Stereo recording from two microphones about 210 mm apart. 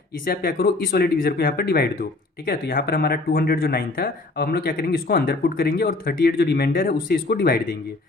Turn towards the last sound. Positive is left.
turn(degrees=50)  # may be behind; listen again after turning